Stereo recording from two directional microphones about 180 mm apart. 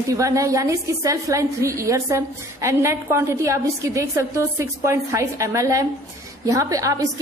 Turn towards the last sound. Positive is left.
turn(degrees=-20)  # may be behind; listen again after turning